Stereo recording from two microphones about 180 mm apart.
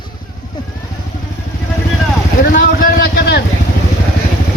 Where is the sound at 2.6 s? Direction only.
50° left (ahead or behind).